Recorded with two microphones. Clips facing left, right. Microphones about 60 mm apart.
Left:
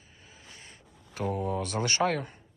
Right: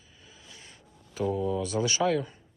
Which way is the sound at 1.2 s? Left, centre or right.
Left.